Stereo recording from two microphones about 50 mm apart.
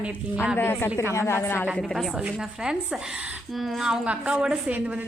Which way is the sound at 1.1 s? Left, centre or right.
Left.